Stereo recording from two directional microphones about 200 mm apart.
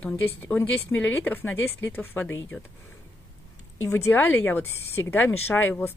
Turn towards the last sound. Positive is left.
turn(degrees=10)  # may be behind; listen again after turning